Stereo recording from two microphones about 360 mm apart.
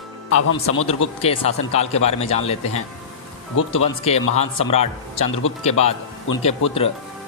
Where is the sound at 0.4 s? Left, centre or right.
Left.